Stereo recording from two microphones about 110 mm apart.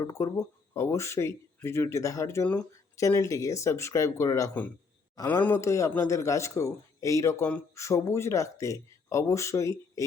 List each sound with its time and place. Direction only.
0.0 s speech: 30° left (ahead or behind)
5.3 s speech: 15° left (ahead or behind)